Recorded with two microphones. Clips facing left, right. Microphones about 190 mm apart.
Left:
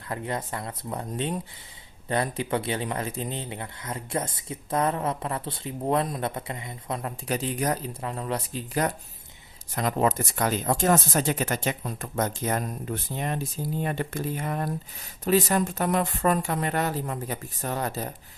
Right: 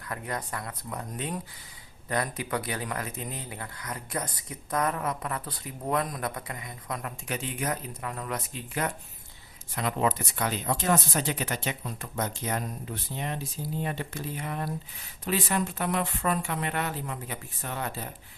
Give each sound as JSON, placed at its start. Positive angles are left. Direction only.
{"t": 0.1, "sound": "speech", "side_deg": 25}